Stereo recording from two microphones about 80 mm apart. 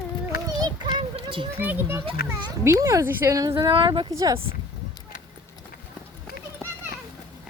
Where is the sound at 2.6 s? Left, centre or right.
Right.